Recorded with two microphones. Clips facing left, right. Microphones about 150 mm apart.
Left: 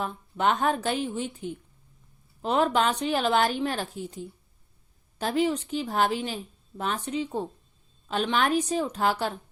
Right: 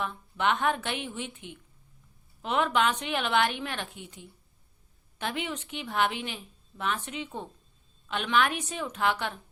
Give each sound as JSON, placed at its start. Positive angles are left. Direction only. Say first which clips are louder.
{"t": 0.0, "sound": "a woman's voice", "louder": "left 3 dB", "side_deg": 40}